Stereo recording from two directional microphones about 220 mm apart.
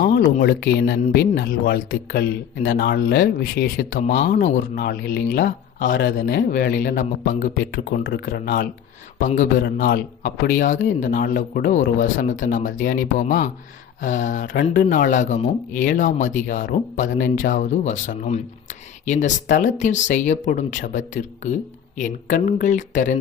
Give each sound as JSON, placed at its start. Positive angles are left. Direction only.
{"t": 0.3, "sound": "speech", "side_deg": 45}